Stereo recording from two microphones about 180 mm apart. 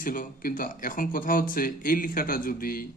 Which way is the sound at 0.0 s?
50° left (ahead or behind).